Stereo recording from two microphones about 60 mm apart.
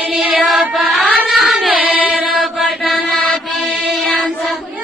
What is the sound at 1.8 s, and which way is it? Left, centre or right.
Mantra, right.